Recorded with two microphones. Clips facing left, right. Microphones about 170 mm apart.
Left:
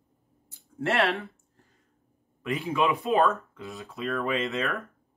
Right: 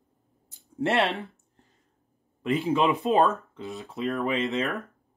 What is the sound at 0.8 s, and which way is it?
Speech, 20° right (ahead or behind).